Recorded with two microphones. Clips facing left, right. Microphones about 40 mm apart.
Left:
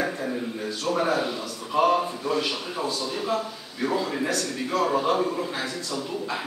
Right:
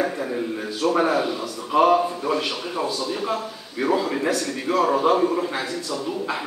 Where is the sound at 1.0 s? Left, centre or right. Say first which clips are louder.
Right 3 dB; centre.